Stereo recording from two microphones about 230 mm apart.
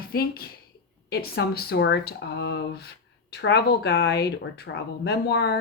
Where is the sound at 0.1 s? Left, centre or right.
Left.